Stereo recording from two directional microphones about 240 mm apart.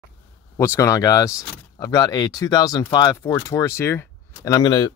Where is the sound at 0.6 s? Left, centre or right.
Centre.